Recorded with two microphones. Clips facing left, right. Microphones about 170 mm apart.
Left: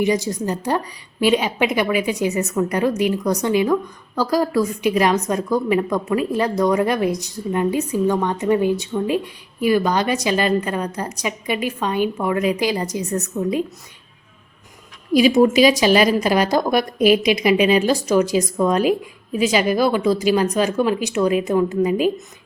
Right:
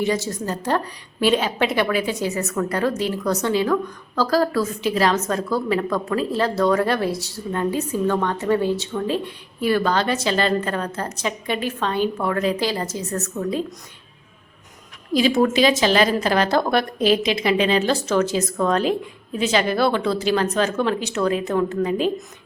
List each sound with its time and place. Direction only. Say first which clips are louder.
0.0 s a woman's voice: left 3 dB; 15° left (ahead or behind)
15.1 s a woman's voice: left 4 dB; 15° left (ahead or behind)